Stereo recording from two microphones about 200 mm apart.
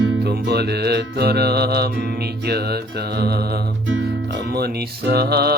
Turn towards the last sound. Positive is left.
turn(degrees=-50)  # may be behind; listen again after turning